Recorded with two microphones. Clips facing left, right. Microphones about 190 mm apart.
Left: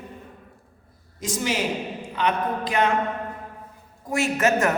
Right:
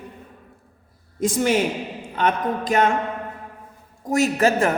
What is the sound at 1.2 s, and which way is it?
A woman's voice, 55° right (ahead or behind).